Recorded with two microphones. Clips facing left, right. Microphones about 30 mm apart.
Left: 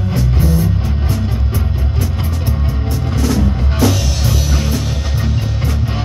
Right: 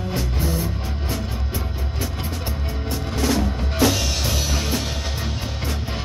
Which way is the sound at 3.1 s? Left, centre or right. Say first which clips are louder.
Left 4 dB; centre.